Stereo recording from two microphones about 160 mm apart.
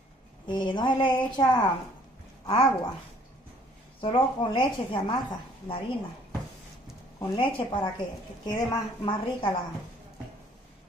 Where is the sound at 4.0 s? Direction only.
30° left (ahead or behind).